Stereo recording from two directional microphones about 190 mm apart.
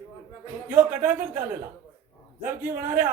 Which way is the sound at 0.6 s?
10° right (ahead or behind).